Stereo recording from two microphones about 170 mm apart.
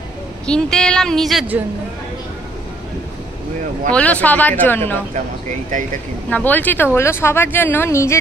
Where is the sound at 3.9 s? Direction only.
10° left (ahead or behind).